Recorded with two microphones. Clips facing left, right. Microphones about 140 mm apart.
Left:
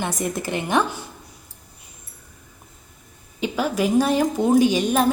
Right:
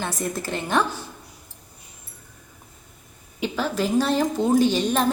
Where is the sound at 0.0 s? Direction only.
15° left (ahead or behind).